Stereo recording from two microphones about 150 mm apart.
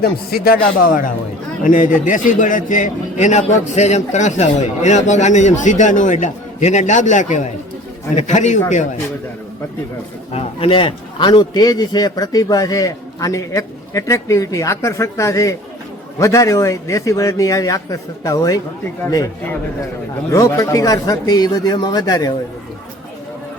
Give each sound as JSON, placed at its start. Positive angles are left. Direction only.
{"t": 0.0, "sound": "a man's voice", "side_deg": 90}
{"t": 10.3, "sound": "a man's voice", "side_deg": 40}
{"t": 20.3, "sound": "a man's voice", "side_deg": 20}